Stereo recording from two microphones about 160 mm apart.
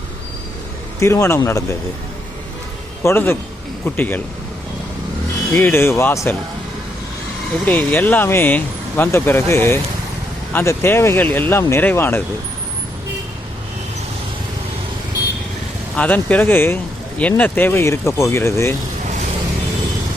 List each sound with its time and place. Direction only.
0.9 s speech: 20° left (ahead or behind)
3.0 s speech: 15° left (ahead or behind)
5.5 s speech: 15° left (ahead or behind)
7.6 s speech: 10° left (ahead or behind)
16.0 s speech: 10° left (ahead or behind)